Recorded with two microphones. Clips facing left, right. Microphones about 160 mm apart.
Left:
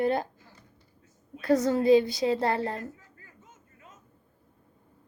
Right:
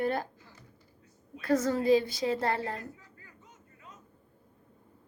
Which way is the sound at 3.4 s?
45° left (ahead or behind).